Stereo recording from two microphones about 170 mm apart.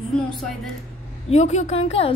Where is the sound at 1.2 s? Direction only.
40° left (ahead or behind).